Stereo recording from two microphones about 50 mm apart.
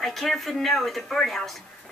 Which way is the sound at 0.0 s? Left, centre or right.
Centre.